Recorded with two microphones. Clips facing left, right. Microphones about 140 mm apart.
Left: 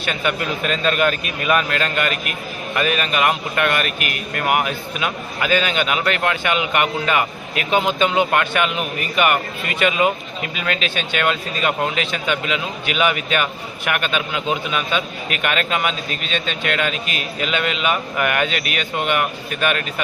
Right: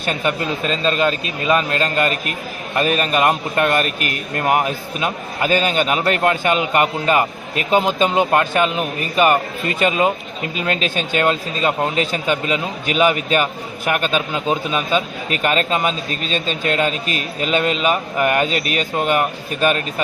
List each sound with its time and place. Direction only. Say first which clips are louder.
0.0 s a man's voice: right 2 dB; 40° right (ahead or behind)
0.3 s a man's voice: right 1 dB; 25° right (ahead or behind)